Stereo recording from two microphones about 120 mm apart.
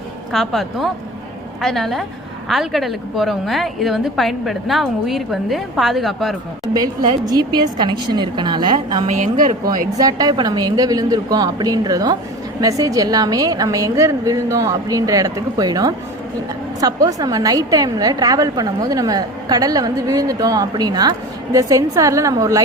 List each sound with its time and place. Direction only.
0.3 s a woman's voice: centre (ahead or behind)
6.7 s a woman's voice: 30° right (ahead or behind)
9.0 s a woman's voice: 85° right
9.6 s a woman's voice: 30° right (ahead or behind)